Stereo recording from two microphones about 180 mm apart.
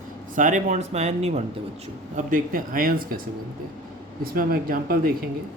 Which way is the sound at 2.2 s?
50° right (ahead or behind).